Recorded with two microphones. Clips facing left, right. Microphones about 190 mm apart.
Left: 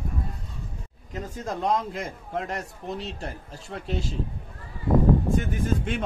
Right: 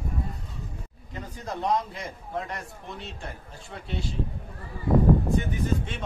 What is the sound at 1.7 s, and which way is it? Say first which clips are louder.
A man's voice: left 1 dB; 45° left (ahead or behind).